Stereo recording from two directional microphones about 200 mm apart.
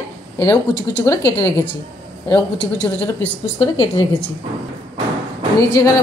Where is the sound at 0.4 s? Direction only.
15° left (ahead or behind).